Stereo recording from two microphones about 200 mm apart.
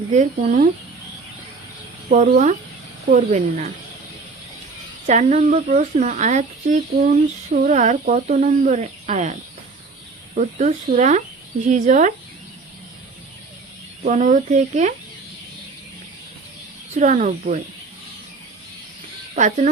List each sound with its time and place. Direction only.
0.1 s speech: 40° right (ahead or behind)
2.0 s speech: 40° right (ahead or behind)
5.0 s speech: 35° right (ahead or behind)
10.3 s speech: 40° right (ahead or behind)
14.0 s speech: 40° right (ahead or behind)
16.9 s speech: 35° right (ahead or behind)
19.4 s speech: 35° right (ahead or behind)